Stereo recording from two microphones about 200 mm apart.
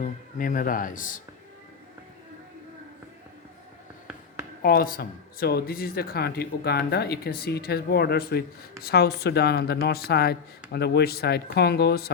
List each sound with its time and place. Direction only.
0.0 s speech: 40° left (ahead or behind)
4.6 s speech: 50° left (ahead or behind)